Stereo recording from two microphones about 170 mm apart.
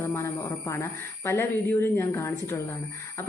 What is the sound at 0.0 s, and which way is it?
Speech, 15° left (ahead or behind).